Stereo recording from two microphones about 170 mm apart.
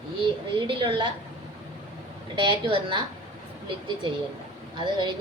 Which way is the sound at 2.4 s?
30° right (ahead or behind).